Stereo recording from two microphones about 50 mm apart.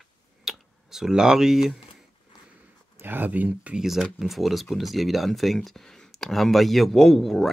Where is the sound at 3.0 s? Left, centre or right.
Right.